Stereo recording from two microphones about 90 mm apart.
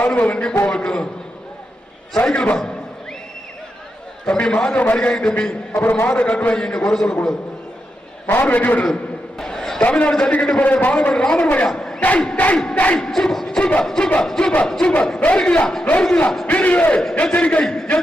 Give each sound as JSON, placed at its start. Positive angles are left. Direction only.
{"t": 0.1, "sound": "speech", "side_deg": 15}
{"t": 2.1, "sound": "speech", "side_deg": 10}
{"t": 4.3, "sound": "speech", "side_deg": 10}
{"t": 8.3, "sound": "speech", "side_deg": 20}
{"t": 9.4, "sound": "a sound", "side_deg": 5}
{"t": 9.8, "sound": "speech", "side_deg": 10}